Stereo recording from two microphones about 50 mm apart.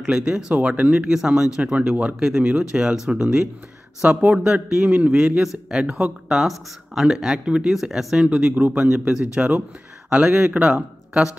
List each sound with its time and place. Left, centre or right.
0.0 s speech: centre
4.0 s a man's voice: right
4.4 s speech: right
8.5 s a man's voice: right
8.8 s speech: centre